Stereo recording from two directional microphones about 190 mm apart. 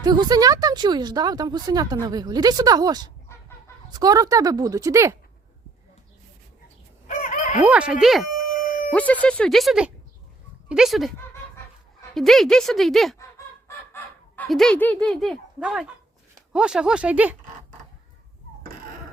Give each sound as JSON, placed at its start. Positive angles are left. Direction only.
{"t": 0.0, "sound": "speech", "side_deg": -20}
{"t": 7.1, "sound": "crowing", "side_deg": 40}
{"t": 7.6, "sound": "speech", "side_deg": -5}
{"t": 12.1, "sound": "speech", "side_deg": 0}
{"t": 13.7, "sound": "fowl", "side_deg": 10}
{"t": 14.4, "sound": "speech", "side_deg": 0}